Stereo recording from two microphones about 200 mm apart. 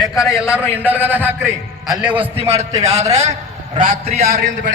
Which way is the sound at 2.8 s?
35° right (ahead or behind).